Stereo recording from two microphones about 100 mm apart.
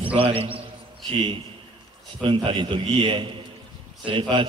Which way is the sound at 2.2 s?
60° right (ahead or behind).